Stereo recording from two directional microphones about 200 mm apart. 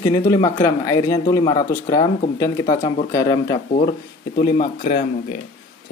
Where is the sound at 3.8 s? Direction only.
45° left (ahead or behind).